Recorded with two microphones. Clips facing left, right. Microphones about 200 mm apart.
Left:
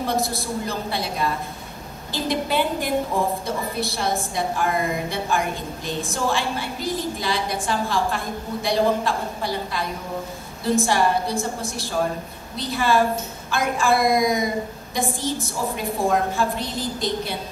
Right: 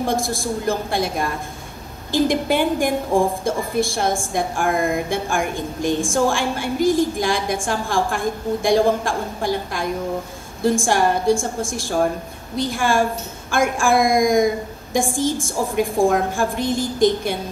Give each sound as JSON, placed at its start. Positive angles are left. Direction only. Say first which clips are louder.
{"t": 0.1, "sound": "a woman's voice", "louder": "right 2 dB", "side_deg": -50}